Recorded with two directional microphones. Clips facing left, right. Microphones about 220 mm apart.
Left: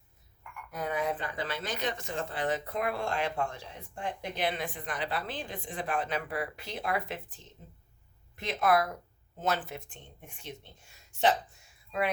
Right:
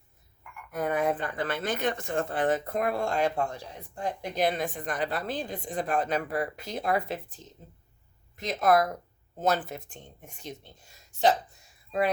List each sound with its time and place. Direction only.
0.7 s speech: 50° right (ahead or behind)